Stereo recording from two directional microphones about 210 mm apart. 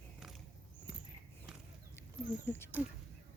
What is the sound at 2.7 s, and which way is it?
Speech, 10° right (ahead or behind).